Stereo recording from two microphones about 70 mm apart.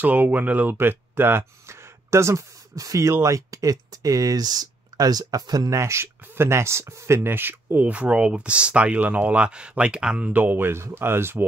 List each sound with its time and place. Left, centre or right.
0.0 s speech: right
5.7 s speech: right
7.2 s speech: right; by 10.3 s centre
10.3 s speech: right